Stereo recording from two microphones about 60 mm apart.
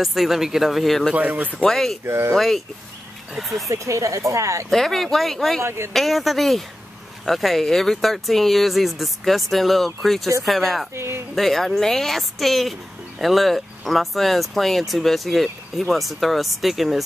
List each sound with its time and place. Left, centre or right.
0.0 s speech: centre
1.1 s speech: right
1.5 s speech: centre
2.0 s speech: right
2.3 s speech: centre
3.6 s speech: right
4.6 s speech: centre
5.6 s speech: right
5.9 s speech: centre
11.0 s speech: right
11.3 s speech: centre